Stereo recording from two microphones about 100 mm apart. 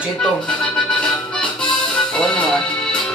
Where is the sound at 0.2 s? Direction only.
10° left (ahead or behind).